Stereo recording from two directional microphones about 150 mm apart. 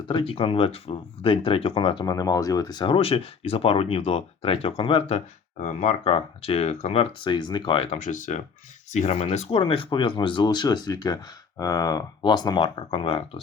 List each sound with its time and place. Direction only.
0.1 s speech: 35° left (ahead or behind)
7.3 s speech: 30° left (ahead or behind)
8.0 s speech: 55° left (ahead or behind); by 13.4 s 35° left (ahead or behind)